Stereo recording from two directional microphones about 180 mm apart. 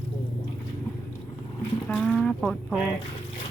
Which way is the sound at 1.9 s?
5° left (ahead or behind).